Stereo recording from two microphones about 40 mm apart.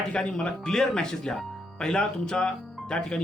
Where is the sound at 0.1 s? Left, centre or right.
Left.